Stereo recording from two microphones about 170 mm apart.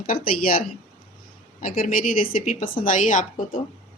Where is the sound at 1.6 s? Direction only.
55° left (ahead or behind).